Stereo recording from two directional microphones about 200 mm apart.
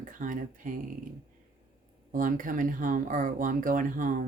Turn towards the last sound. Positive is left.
turn(degrees=-40)  # may be behind; listen again after turning